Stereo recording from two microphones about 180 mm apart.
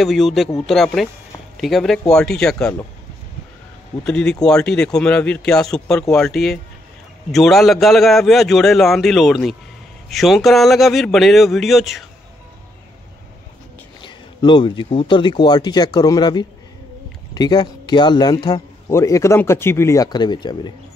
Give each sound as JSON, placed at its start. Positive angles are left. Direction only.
{"t": 0.0, "sound": "a man's voice", "side_deg": 0}
{"t": 4.0, "sound": "a man's voice", "side_deg": 5}
{"t": 14.0, "sound": "speech", "side_deg": 25}